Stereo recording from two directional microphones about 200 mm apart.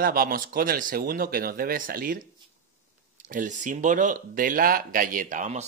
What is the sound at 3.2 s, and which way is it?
Speech, 40° right (ahead or behind).